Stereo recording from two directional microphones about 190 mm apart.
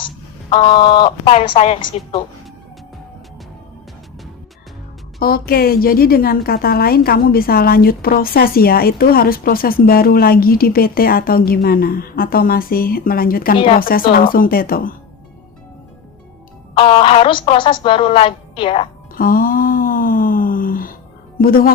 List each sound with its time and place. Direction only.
0.5 s speech: 25° left (ahead or behind)
5.2 s a woman's voice: 50° left (ahead or behind)
16.7 s speech: 25° left (ahead or behind)
19.1 s a sound: 50° left (ahead or behind)
21.3 s speech: 50° left (ahead or behind)